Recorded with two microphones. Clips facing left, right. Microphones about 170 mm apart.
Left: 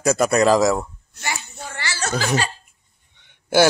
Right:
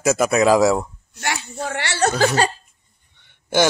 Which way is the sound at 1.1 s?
75° right (ahead or behind).